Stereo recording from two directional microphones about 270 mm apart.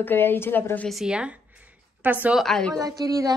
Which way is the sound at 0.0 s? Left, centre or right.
Centre.